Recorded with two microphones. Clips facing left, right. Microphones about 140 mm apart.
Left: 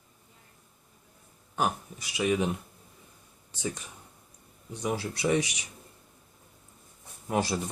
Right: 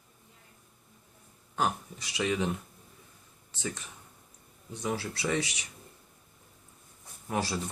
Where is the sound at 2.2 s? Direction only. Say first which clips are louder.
Left 3 dB; 15° left (ahead or behind).